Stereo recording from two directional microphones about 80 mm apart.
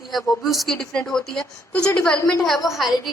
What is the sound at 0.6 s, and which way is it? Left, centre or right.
A woman's voice, centre.